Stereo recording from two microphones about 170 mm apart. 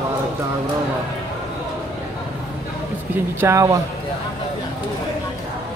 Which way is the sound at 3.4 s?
15° right (ahead or behind).